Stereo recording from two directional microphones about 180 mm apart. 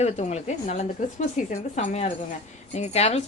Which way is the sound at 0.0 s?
35° left (ahead or behind).